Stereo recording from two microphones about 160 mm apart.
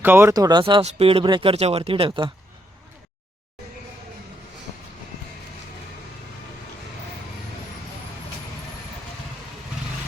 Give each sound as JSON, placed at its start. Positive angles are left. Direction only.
{"t": 0.0, "sound": "speech", "side_deg": -15}